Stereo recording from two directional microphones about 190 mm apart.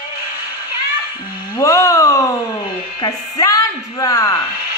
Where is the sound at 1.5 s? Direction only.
20° left (ahead or behind).